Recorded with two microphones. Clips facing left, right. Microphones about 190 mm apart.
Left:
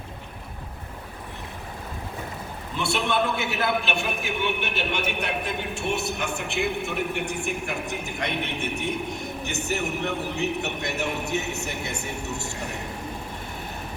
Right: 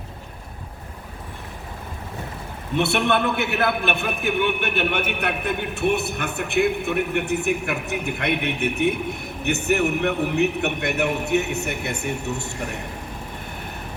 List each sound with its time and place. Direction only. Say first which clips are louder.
2.7 s a man's voice: right 5 dB; 65° right (ahead or behind)